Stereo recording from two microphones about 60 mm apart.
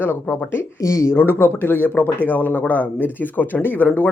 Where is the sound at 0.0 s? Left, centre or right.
Left.